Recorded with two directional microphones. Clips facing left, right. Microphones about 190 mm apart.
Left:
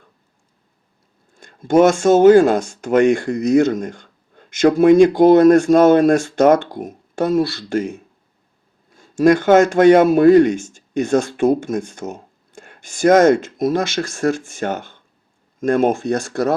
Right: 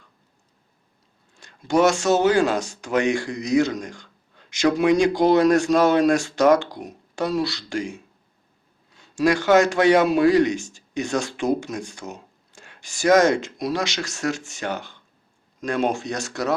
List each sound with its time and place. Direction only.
1.3 s a man's voice: 50° left (ahead or behind)